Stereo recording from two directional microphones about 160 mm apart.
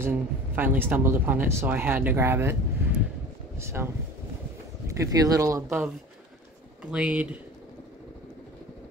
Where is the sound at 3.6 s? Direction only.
15° right (ahead or behind).